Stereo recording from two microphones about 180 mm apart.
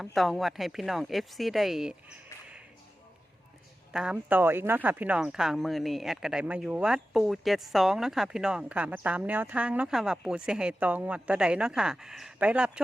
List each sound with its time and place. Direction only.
0.0 s speech: centre (ahead or behind)
3.9 s speech: 5° right (ahead or behind)